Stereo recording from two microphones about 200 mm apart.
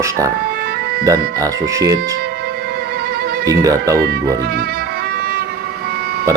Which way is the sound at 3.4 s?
15° right (ahead or behind).